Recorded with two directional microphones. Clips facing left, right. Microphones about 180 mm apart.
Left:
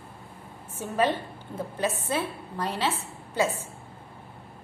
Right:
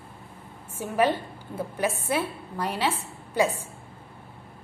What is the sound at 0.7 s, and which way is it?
A woman's voice, 10° right (ahead or behind).